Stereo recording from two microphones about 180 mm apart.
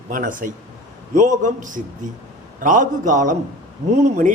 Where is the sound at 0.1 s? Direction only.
50° right (ahead or behind).